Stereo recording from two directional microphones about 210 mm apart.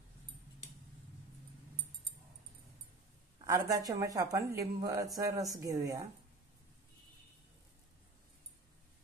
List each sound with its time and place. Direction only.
3.3 s speech: 15° right (ahead or behind)